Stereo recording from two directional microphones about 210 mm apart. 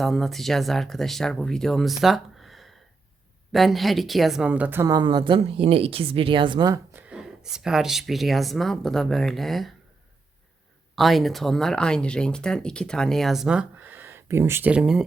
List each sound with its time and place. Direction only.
0.0 s a woman's voice: centre (ahead or behind); by 6.7 s 20° right (ahead or behind)
6.9 s speech: 5° right (ahead or behind)
10.9 s speech: centre (ahead or behind)